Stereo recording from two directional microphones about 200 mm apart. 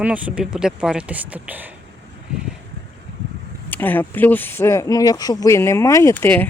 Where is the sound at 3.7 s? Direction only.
10° left (ahead or behind).